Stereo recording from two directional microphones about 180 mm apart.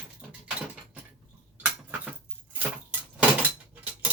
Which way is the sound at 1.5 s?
10° right (ahead or behind).